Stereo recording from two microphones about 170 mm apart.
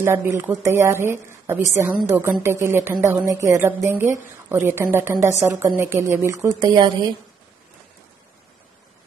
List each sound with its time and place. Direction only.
0.0 s a woman's voice: 15° right (ahead or behind)